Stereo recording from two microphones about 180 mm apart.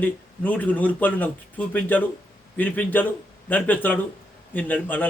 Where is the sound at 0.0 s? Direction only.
10° left (ahead or behind).